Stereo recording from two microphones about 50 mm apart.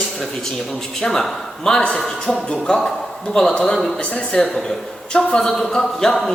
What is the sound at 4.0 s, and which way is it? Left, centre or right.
Speech, left.